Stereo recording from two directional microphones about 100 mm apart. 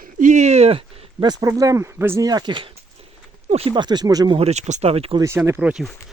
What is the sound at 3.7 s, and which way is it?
Speech, 50° right (ahead or behind).